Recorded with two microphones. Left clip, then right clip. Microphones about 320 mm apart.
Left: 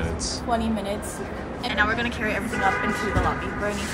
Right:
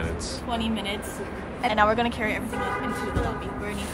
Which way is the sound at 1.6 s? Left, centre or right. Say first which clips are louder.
Right 2 dB; right.